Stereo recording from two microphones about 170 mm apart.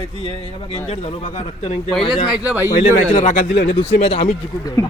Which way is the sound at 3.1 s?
45° left (ahead or behind).